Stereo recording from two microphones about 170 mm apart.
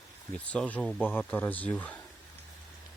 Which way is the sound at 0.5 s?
5° left (ahead or behind).